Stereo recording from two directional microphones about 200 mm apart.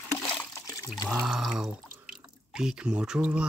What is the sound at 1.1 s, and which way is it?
Speech, centre (ahead or behind).